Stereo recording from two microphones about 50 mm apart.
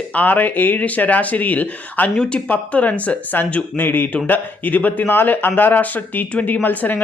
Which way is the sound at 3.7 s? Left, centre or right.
Left.